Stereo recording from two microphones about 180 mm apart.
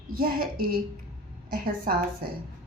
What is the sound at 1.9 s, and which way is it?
Speech, 50° right (ahead or behind).